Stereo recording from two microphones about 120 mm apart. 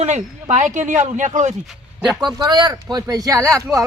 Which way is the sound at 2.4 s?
35° right (ahead or behind).